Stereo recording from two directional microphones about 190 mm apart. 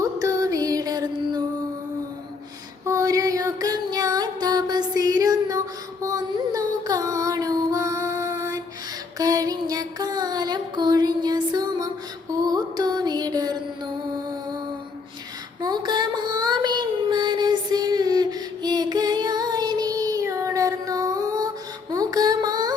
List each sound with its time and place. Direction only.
0.0 s music: 15° right (ahead or behind)
2.8 s music: 15° right (ahead or behind)
15.6 s child singing: 20° right (ahead or behind)
21.9 s mantra: 20° right (ahead or behind)